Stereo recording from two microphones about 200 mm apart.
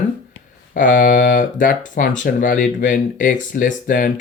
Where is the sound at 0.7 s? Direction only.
40° left (ahead or behind).